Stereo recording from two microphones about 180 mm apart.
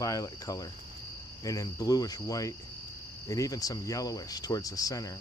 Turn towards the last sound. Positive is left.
turn(degrees=20)  # may be behind; listen again after turning